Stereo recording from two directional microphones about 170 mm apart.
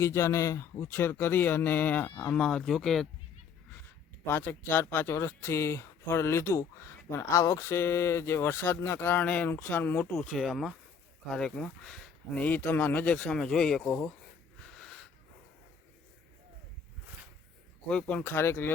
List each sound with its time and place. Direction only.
0.0 s speech: 15° left (ahead or behind)
4.3 s speech: 10° left (ahead or behind)
10.2 s speech: centre (ahead or behind)
14.6 s wheeze: 5° left (ahead or behind)
17.8 s speech: 5° left (ahead or behind)